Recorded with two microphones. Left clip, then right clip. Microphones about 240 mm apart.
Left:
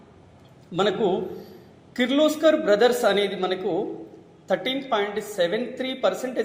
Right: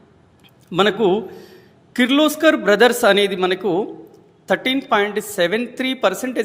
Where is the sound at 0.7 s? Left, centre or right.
Right.